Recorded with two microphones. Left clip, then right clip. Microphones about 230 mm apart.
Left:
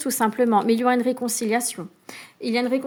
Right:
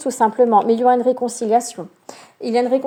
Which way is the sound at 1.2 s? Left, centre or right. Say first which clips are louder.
Right 5 dB; left.